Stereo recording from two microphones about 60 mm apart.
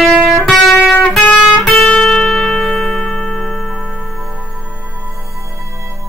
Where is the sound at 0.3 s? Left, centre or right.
Centre.